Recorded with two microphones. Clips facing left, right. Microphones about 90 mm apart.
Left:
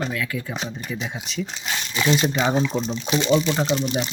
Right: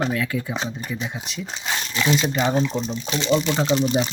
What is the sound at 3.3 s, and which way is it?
Speech, centre (ahead or behind).